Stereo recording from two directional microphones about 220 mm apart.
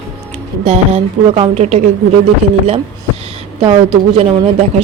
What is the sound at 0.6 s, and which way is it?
Speech, 30° right (ahead or behind).